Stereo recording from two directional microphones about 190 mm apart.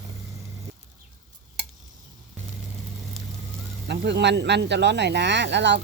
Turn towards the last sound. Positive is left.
turn(degrees=-65)  # may be behind; listen again after turning